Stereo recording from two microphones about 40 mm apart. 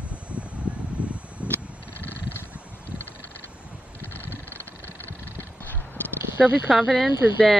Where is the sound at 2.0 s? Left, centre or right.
Left.